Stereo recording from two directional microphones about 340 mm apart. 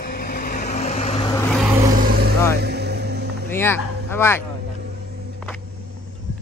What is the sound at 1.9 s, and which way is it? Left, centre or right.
Vehicle, right.